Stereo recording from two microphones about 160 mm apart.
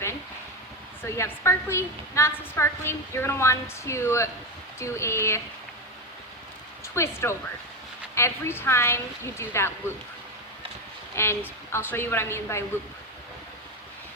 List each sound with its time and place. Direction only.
1.0 s a woman's voice: 15° left (ahead or behind)
6.8 s a woman's voice: 15° left (ahead or behind)
11.1 s a woman's voice: 15° left (ahead or behind)